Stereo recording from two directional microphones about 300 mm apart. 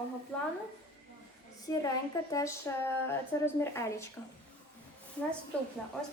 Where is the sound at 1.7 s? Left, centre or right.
Centre.